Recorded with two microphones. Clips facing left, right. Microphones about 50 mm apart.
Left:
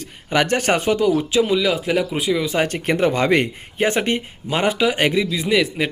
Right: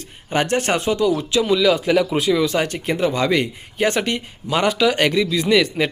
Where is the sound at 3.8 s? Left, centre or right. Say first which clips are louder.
Left 1 dB; left; by 5.9 s centre.